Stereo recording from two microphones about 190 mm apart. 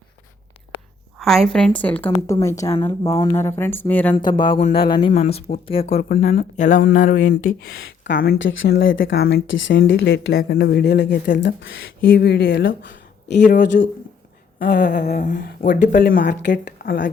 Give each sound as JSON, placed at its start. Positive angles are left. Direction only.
{"t": 1.2, "sound": "a woman's voice", "side_deg": 0}
{"t": 4.1, "sound": "speech", "side_deg": 25}
{"t": 6.8, "sound": "a sound", "side_deg": 50}
{"t": 8.0, "sound": "speech", "side_deg": 60}
{"t": 8.4, "sound": "speech", "side_deg": 75}
{"t": 13.7, "sound": "a sound", "side_deg": 50}
{"t": 15.6, "sound": "speech", "side_deg": 65}